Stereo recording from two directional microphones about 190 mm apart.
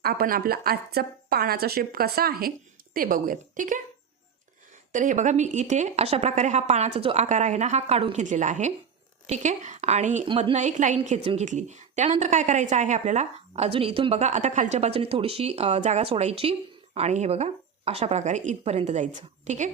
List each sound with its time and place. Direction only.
0.0 s a woman's voice: 55° right (ahead or behind)
4.9 s a woman's voice: 40° right (ahead or behind)
10.2 s a woman's voice: 30° right (ahead or behind)